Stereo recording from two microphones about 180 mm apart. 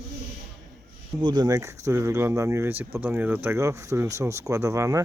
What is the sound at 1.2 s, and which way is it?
Speech, 25° right (ahead or behind).